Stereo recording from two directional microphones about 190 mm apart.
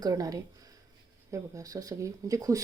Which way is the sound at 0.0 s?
20° right (ahead or behind).